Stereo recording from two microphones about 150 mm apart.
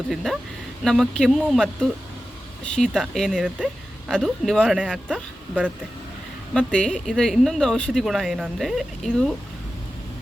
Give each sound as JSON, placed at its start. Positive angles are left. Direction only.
{"t": 0.1, "sound": "speech", "side_deg": 0}
{"t": 6.5, "sound": "speech", "side_deg": 5}